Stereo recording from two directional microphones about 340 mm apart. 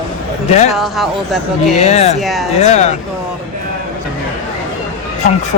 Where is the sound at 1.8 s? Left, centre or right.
Centre.